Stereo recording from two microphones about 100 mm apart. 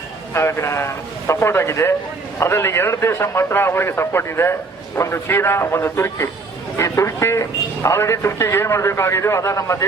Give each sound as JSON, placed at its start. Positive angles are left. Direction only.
{"t": 0.3, "sound": "a man's voice", "side_deg": 25}